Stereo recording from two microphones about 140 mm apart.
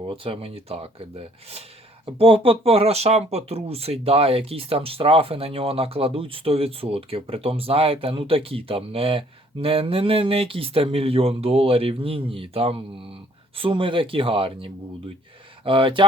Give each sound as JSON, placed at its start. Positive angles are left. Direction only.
{"t": 0.1, "sound": "speech", "side_deg": -40}